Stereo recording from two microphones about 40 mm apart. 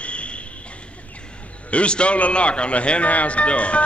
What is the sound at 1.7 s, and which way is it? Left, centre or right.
Music, left.